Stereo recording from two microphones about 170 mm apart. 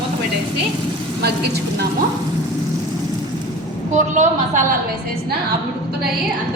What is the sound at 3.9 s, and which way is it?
Speech, 45° right (ahead or behind).